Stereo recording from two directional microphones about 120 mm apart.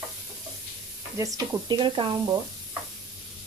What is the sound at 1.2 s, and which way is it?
Speech, 30° right (ahead or behind).